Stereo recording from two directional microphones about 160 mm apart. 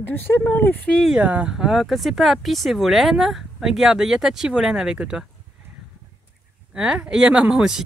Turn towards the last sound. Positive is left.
turn(degrees=-5)  # may be behind; listen again after turning